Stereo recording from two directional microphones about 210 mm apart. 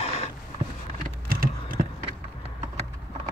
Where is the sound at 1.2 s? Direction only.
45° right (ahead or behind).